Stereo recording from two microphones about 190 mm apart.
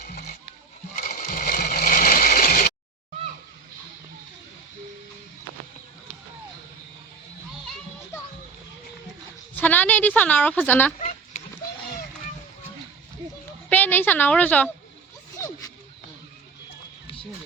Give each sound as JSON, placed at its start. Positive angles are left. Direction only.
{"t": 0.0, "sound": "music", "side_deg": 40}
{"t": 0.9, "sound": "a sound", "side_deg": 50}
{"t": 7.6, "sound": "children playing", "side_deg": 0}
{"t": 9.6, "sound": "a woman's voice", "side_deg": 10}
{"t": 13.7, "sound": "a woman's voice", "side_deg": 10}